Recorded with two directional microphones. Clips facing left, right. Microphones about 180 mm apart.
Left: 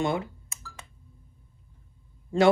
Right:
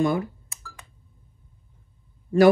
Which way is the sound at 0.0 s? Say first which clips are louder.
Right 5 dB; 20° left (ahead or behind).